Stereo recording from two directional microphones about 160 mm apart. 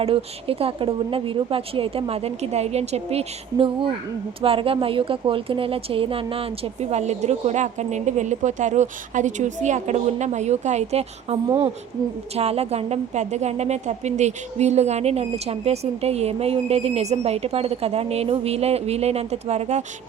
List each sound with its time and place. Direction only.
0.0 s a woman's voice: 35° right (ahead or behind)